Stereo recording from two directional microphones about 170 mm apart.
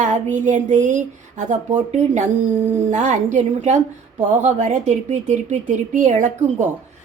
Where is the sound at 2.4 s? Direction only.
10° right (ahead or behind).